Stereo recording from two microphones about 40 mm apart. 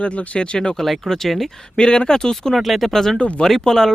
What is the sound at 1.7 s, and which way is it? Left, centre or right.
Speech, left.